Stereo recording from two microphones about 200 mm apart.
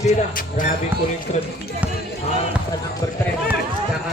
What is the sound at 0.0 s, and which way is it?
Music, 40° left (ahead or behind).